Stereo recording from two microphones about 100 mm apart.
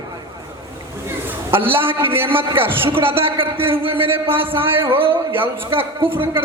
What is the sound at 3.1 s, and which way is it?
Speech, 65° right (ahead or behind).